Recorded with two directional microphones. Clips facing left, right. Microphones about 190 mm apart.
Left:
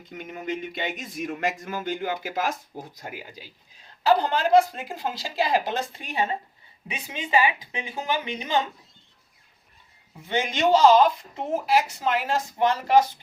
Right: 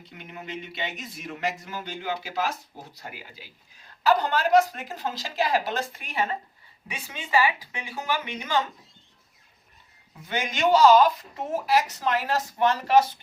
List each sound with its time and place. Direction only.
0.6 s speech: 50° left (ahead or behind)
4.0 s a woman's voice: 30° left (ahead or behind)
4.5 s speech: 15° left (ahead or behind)
10.2 s speech: 25° left (ahead or behind)
11.7 s speech: 15° left (ahead or behind)